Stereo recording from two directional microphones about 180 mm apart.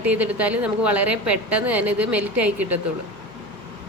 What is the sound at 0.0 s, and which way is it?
A woman's voice, 10° right (ahead or behind).